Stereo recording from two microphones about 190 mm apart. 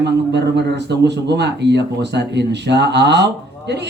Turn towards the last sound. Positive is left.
turn(degrees=-65)  # may be behind; listen again after turning